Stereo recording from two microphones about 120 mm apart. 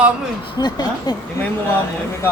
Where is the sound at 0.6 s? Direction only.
35° left (ahead or behind).